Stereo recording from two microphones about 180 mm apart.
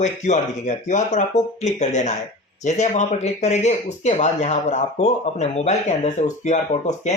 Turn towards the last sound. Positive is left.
turn(degrees=40)  # may be behind; listen again after turning